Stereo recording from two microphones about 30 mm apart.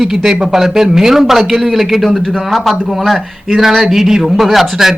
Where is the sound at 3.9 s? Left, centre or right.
Centre.